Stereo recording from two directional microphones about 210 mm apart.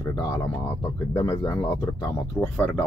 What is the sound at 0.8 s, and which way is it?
Speech, 15° left (ahead or behind).